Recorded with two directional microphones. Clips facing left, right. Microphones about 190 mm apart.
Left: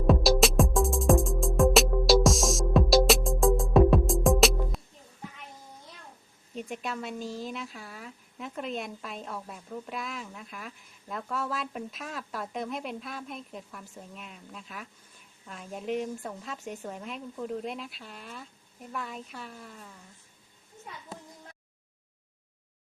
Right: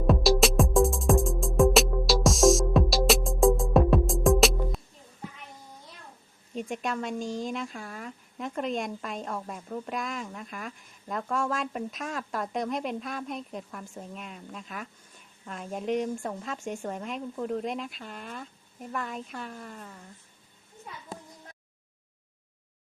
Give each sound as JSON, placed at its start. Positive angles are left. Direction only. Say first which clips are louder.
{"t": 0.1, "sound": "music", "louder": "even", "side_deg": 0}
{"t": 6.5, "sound": "a woman's voice", "louder": "right 4 dB", "side_deg": 0}
{"t": 16.6, "sound": "speech", "louder": "right 4 dB", "side_deg": -45}
{"t": 16.8, "sound": "a woman's voice", "louder": "right 4 dB", "side_deg": 0}